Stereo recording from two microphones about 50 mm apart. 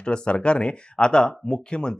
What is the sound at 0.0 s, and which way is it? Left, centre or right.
Speech, centre.